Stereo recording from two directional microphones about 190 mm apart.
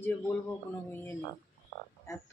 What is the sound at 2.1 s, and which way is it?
Speech, 15° left (ahead or behind).